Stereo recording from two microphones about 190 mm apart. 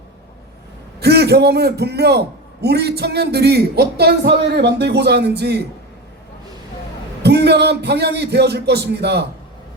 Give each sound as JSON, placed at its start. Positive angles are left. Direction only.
{"t": 0.9, "sound": "a man's voice", "side_deg": -55}
{"t": 7.2, "sound": "a man's voice", "side_deg": -60}